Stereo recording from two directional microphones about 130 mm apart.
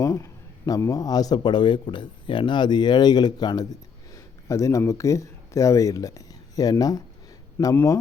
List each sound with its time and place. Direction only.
0.0 s a sound: 25° left (ahead or behind)
0.9 s speech: 30° left (ahead or behind)
7.6 s speech: 15° left (ahead or behind)